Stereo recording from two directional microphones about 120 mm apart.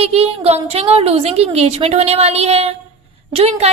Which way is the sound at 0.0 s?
60° right (ahead or behind).